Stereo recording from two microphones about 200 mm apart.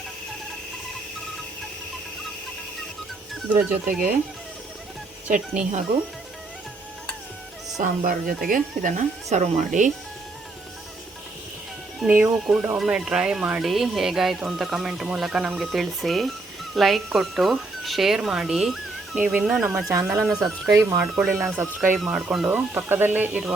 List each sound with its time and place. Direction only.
5.3 s speech: 40° right (ahead or behind)
7.8 s speech: 40° right (ahead or behind)
11.9 s speech: 10° right (ahead or behind)
21.8 s speech: centre (ahead or behind)